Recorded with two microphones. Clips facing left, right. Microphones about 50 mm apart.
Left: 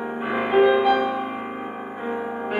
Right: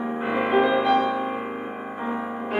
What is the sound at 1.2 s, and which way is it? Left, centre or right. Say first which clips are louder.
Music: right 1 dB; centre.